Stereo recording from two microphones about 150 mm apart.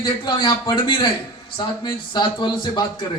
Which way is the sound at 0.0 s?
30° left (ahead or behind).